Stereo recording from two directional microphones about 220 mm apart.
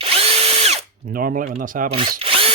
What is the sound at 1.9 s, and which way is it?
Drill, 25° right (ahead or behind).